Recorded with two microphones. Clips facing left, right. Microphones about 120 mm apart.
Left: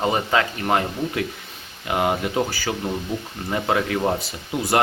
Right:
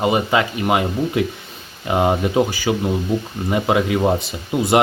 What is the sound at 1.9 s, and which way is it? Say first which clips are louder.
Speech: right 5 dB; 25° right (ahead or behind).